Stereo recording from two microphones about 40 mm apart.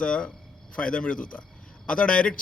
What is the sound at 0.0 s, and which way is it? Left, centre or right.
A man's voice, left.